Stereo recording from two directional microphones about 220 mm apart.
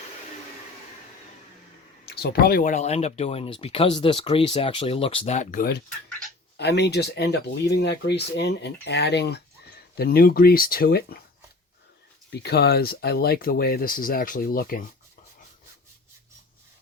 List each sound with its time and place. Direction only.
2.0 s speech: 45° left (ahead or behind)
6.1 s a sound: 5° left (ahead or behind)
6.6 s speech: 50° left (ahead or behind)
12.3 s speech: 50° left (ahead or behind)